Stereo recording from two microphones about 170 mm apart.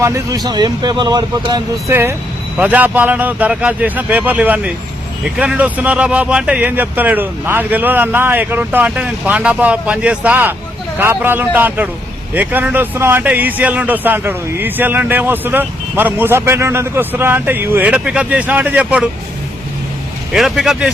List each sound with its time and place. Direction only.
0.0 s speech: 20° right (ahead or behind)
1.9 s a man's voice: 15° right (ahead or behind)
20.3 s speech: centre (ahead or behind)